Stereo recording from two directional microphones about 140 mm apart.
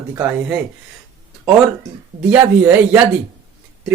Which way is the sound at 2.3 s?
10° right (ahead or behind).